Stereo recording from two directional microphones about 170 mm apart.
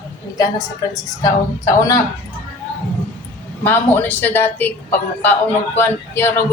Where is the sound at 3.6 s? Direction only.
10° left (ahead or behind).